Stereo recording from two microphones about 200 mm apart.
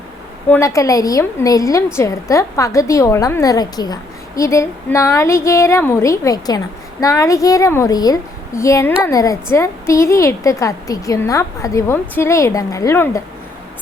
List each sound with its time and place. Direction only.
0.5 s a woman's voice: 15° left (ahead or behind)